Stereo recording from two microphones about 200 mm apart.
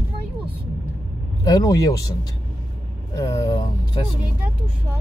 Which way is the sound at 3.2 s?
15° left (ahead or behind).